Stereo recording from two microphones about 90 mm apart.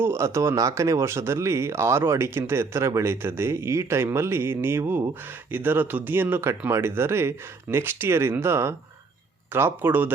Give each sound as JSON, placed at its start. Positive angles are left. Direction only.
{"t": 0.0, "sound": "speech", "side_deg": -30}